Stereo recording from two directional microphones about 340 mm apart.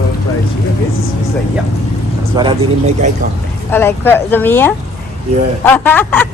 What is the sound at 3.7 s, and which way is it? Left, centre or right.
Speech, centre.